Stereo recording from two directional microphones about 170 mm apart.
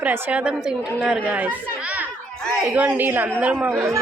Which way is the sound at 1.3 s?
5° right (ahead or behind).